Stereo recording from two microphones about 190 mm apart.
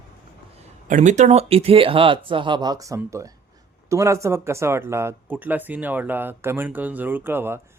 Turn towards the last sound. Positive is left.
turn(degrees=-15)  # may be behind; listen again after turning